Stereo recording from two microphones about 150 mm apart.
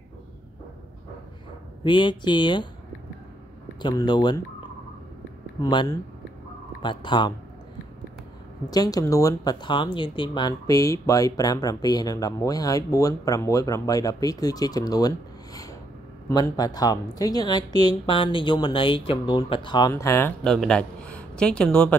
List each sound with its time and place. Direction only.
1.9 s speech: 30° left (ahead or behind)
3.8 s speech: 30° left (ahead or behind)
5.6 s speech: 25° left (ahead or behind)
8.6 s speech: 25° left (ahead or behind)
19.9 s speech: 15° left (ahead or behind)
20.4 s speech: 5° left (ahead or behind)